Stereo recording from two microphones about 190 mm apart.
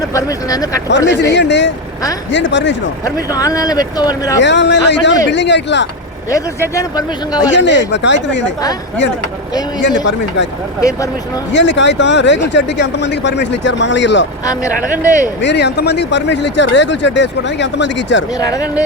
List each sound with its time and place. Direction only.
0.0 s speech: 15° left (ahead or behind)
0.9 s speech: 65° left (ahead or behind)
3.2 s speech: 20° left (ahead or behind)
4.4 s speech: 70° left (ahead or behind)
6.3 s speech: 15° left (ahead or behind)
7.5 s speech: 70° left (ahead or behind)
9.8 s speech: 70° left (ahead or behind)
11.5 s speech: 70° left (ahead or behind)
14.4 s speech: 20° left (ahead or behind)
15.4 s speech: 65° left (ahead or behind)
18.3 s speech: 20° left (ahead or behind)